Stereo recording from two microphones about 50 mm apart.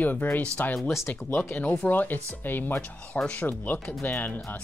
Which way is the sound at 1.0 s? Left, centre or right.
Left.